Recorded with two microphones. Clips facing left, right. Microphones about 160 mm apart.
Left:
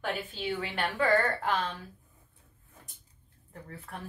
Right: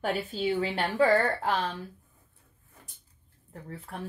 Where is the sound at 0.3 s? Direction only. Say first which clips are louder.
Right 6 dB; 35° right (ahead or behind).